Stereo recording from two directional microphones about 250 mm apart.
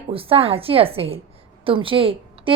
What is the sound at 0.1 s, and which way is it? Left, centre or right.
A woman's voice, right.